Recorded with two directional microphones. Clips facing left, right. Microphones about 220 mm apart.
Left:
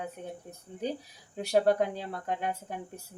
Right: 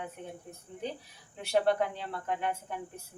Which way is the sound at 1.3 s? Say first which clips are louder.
Left 3 dB; 40° left (ahead or behind).